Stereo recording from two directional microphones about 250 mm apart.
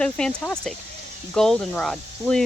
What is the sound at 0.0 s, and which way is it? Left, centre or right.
Speech, centre.